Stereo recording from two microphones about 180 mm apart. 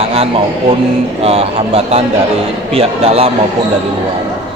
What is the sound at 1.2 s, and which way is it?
Speech, 35° right (ahead or behind).